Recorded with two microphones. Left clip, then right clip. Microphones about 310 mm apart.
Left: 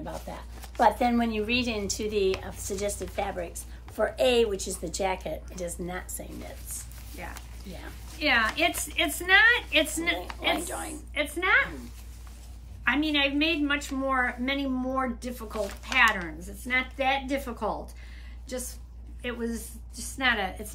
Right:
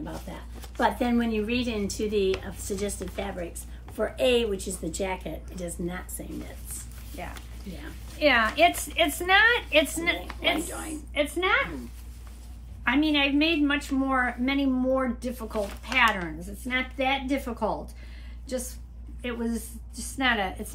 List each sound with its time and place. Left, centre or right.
0.3 s a woman's voice: centre
8.2 s a woman's voice: centre
12.8 s a woman's voice: centre